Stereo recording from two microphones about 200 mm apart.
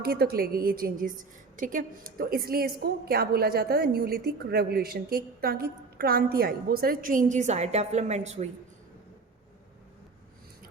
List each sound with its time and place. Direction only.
0.0 s a woman's voice: 50° right (ahead or behind); by 8.4 s 35° right (ahead or behind)